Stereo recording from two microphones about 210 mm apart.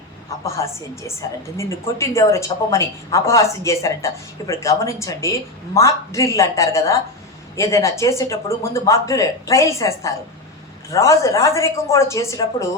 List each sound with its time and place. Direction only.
0.4 s a woman's voice: 15° left (ahead or behind)